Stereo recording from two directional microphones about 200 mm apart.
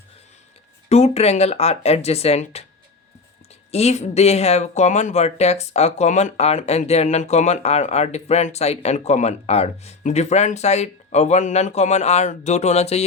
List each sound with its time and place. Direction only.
0.9 s speech: 30° left (ahead or behind)
3.7 s speech: 30° left (ahead or behind)